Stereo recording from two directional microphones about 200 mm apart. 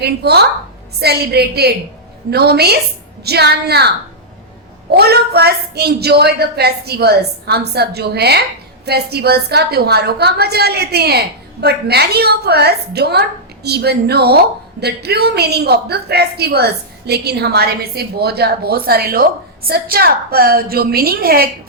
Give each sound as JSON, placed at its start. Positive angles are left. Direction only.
{"t": 0.0, "sound": "a woman's voice", "side_deg": -55}